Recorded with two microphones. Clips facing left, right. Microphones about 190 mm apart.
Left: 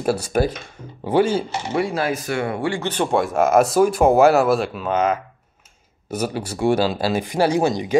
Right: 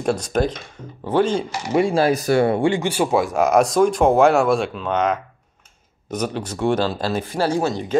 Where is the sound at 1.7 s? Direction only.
30° right (ahead or behind).